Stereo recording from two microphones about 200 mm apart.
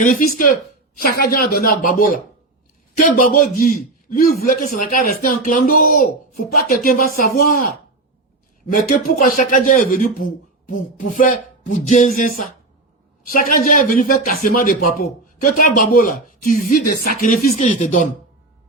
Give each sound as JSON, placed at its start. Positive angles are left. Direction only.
{"t": 0.0, "sound": "a man's voice", "side_deg": 40}
{"t": 13.3, "sound": "a man's voice", "side_deg": 45}